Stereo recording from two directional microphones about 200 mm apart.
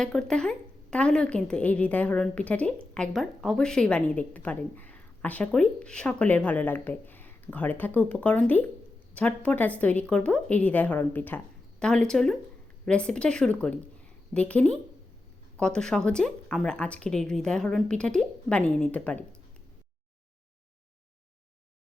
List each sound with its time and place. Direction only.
0.0 s a woman's voice: centre (ahead or behind)